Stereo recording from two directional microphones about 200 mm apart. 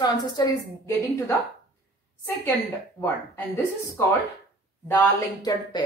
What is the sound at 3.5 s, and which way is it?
Speech, 15° left (ahead or behind).